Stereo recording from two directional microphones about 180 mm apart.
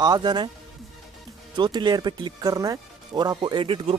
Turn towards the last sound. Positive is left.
turn(degrees=-30)  # may be behind; listen again after turning